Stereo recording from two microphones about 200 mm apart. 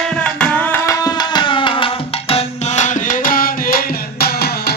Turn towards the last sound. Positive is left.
turn(degrees=50)  # may be behind; listen again after turning